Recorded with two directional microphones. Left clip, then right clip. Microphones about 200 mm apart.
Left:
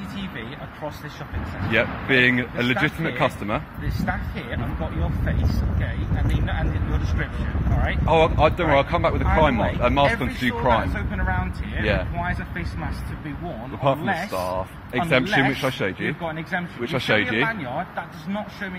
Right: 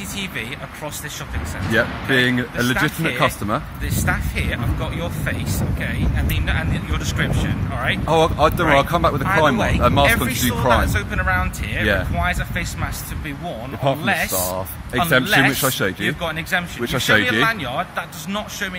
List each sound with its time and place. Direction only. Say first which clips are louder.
1.7 s speech: right 2 dB; 25° right (ahead or behind)
3.0 s speech: right 4 dB; 10° right (ahead or behind)
8.1 s speech: right 1 dB; 30° right (ahead or behind)
11.0 s speech: right 7 dB; 25° right (ahead or behind)
13.8 s speech: right 3 dB; 25° right (ahead or behind)
16.2 s speech: right 6 dB; 20° right (ahead or behind)
16.8 s speech: right 4 dB; 35° right (ahead or behind)
17.5 s speech: right 5 dB; 20° right (ahead or behind)